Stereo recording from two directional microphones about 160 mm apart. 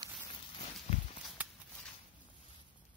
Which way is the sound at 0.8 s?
45° left (ahead or behind).